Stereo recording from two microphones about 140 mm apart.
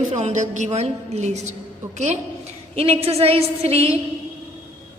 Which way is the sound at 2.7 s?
45° right (ahead or behind).